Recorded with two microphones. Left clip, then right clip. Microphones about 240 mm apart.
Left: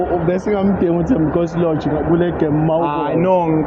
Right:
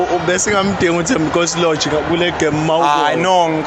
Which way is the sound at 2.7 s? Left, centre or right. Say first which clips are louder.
Right 4 dB; right.